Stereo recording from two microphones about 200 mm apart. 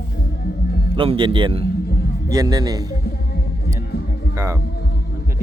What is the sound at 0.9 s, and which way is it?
Speech, 25° right (ahead or behind).